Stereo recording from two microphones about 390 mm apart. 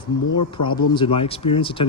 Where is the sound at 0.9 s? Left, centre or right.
Centre.